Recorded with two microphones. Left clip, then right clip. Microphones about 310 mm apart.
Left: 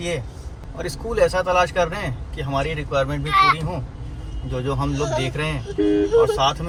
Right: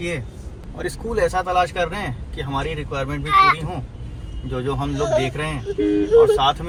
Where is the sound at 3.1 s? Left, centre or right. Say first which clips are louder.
Right 3 dB; centre.